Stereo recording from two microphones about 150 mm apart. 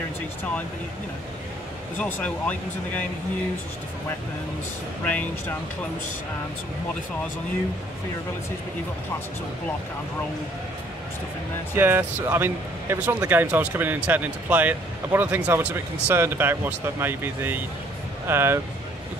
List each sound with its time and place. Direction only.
2.0 s speech: 10° left (ahead or behind)
11.7 s speech: 15° right (ahead or behind)